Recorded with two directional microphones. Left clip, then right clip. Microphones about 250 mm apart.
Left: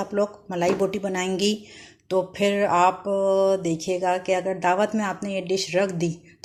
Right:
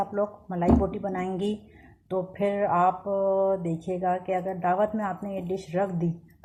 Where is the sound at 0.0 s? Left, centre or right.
Left.